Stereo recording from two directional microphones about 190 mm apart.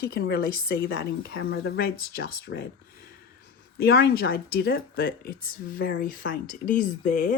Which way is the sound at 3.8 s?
55° left (ahead or behind).